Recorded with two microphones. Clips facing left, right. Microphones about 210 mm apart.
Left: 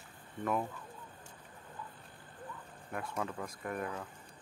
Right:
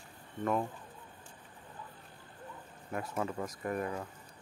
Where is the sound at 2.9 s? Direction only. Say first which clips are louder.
Right 3 dB; 5° right (ahead or behind).